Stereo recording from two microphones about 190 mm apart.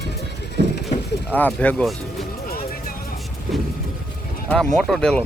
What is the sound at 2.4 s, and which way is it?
Music, 50° left (ahead or behind).